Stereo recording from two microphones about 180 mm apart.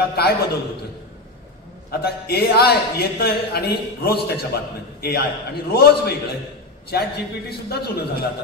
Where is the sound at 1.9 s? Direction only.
60° left (ahead or behind).